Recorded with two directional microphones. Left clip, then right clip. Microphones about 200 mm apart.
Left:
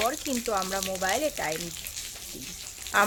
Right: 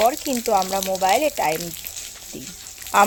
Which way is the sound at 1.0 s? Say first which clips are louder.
Right 10 dB; 30° right (ahead or behind).